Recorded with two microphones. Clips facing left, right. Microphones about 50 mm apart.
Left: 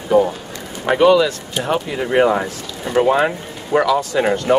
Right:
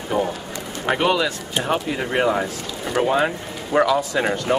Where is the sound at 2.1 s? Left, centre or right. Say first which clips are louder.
Left 6 dB; centre.